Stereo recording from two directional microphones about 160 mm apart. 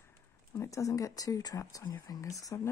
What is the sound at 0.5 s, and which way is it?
Speech, 20° left (ahead or behind).